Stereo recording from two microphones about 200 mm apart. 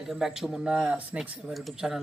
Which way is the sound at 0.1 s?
Centre (ahead or behind).